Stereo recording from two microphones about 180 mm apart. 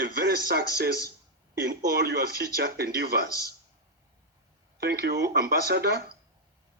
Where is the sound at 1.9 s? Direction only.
65° right (ahead or behind).